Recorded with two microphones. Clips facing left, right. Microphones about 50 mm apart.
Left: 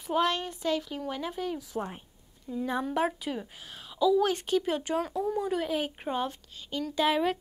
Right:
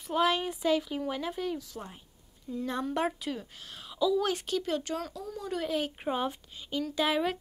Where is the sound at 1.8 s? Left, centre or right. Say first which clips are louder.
Left 8 dB; left.